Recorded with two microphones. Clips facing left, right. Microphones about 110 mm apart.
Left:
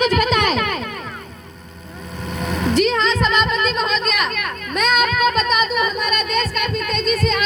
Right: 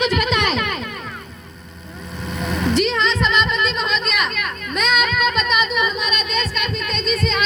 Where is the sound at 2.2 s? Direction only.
50° left (ahead or behind).